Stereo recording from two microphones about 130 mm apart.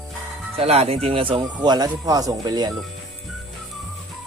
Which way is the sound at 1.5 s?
35° right (ahead or behind).